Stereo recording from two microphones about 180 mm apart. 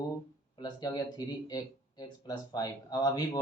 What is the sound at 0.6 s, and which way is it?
Speech, 20° left (ahead or behind).